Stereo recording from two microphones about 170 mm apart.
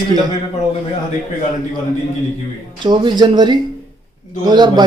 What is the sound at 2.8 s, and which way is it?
Speech, 25° right (ahead or behind).